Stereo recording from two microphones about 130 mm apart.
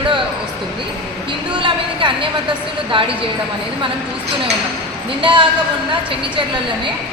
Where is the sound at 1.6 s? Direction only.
40° right (ahead or behind).